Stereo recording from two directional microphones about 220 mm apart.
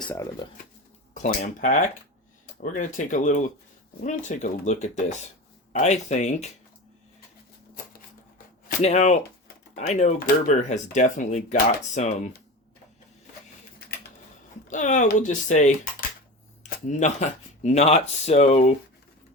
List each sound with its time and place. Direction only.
0.1 s speech: 15° left (ahead or behind)
1.1 s speech: 35° left (ahead or behind)
8.6 s speech: 30° left (ahead or behind)
14.7 s speech: 35° left (ahead or behind)